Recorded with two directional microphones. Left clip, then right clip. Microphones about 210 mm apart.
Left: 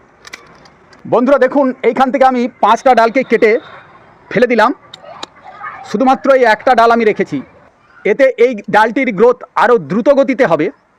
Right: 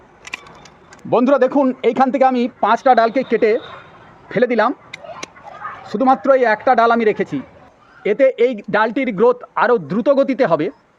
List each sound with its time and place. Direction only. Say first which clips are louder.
1.1 s a man's voice: left 4 dB; 20° left (ahead or behind)
2.6 s a man's voice: left 4 dB; 40° left (ahead or behind)
5.8 s a man's voice: left 3 dB; 50° left (ahead or behind)